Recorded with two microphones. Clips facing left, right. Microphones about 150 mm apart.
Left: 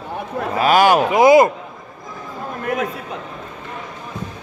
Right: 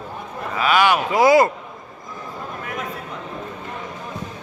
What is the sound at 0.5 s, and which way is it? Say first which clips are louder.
Speech: left 4 dB; 40° left (ahead or behind).